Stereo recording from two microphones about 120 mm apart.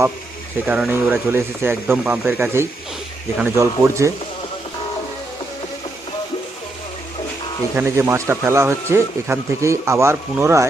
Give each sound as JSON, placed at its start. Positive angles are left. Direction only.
{"t": 0.6, "sound": "speech", "side_deg": -10}
{"t": 7.8, "sound": "speech", "side_deg": -20}